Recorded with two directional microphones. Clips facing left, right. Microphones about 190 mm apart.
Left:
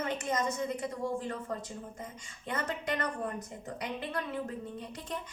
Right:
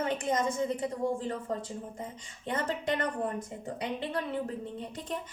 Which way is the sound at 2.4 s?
30° right (ahead or behind).